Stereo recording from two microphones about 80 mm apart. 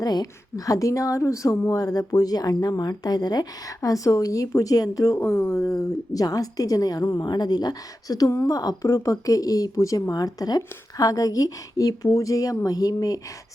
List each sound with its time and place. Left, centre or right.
0.0 s speech: left
3.8 s speech: left
5.2 s speech: left
7.3 s speech: left